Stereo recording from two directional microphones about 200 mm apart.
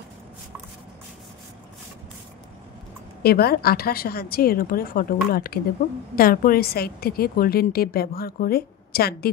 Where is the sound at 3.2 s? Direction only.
50° left (ahead or behind).